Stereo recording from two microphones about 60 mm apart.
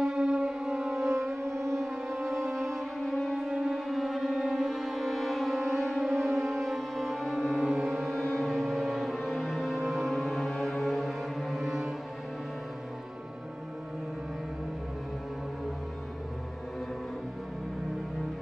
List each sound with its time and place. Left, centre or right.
0.0 s music: centre
1.0 s music: right
1.8 s music: centre
2.3 s music: right
2.6 s music: centre